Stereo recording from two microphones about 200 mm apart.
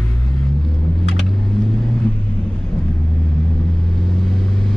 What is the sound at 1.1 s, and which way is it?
Vehicle, centre (ahead or behind).